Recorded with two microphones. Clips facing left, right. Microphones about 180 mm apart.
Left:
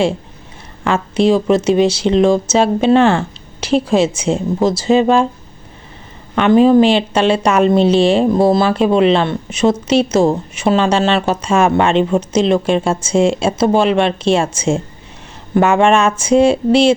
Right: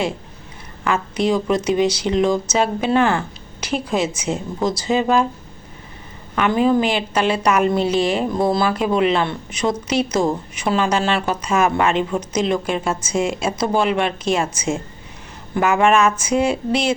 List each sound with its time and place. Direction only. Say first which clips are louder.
0.9 s a woman's voice: left 6 dB; 25° left (ahead or behind)
6.3 s a woman's voice: left 7 dB; 25° left (ahead or behind)